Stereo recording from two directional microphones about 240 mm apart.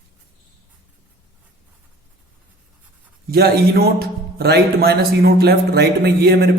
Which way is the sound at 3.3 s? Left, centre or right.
Right.